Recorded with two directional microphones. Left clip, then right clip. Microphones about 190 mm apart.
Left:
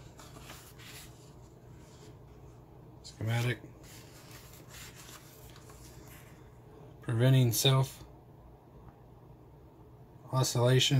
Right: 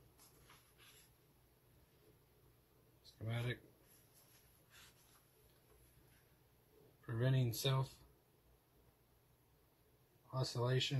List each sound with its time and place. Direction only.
3.0 s a sound: 10° left (ahead or behind)
7.1 s speech: 15° left (ahead or behind)
10.3 s speech: 20° left (ahead or behind)